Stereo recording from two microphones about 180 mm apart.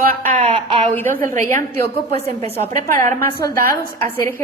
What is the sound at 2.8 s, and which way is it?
A woman's voice, 10° left (ahead or behind).